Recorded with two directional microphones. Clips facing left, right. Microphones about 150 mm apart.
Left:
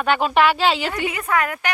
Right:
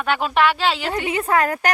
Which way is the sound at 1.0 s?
30° right (ahead or behind).